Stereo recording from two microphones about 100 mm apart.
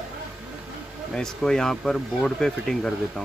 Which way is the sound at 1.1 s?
5° left (ahead or behind).